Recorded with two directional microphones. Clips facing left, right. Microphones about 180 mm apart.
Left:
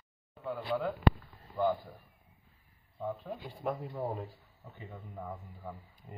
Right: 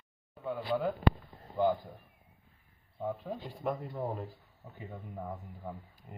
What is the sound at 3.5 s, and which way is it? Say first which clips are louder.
Speech: even; 5° left (ahead or behind).